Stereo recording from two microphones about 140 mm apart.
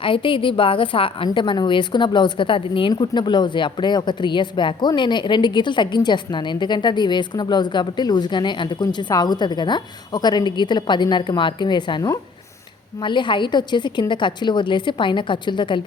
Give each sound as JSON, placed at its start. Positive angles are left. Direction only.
{"t": 0.0, "sound": "a woman's voice", "side_deg": 40}